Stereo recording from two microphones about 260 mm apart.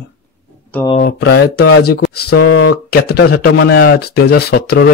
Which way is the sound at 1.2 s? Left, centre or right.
Left.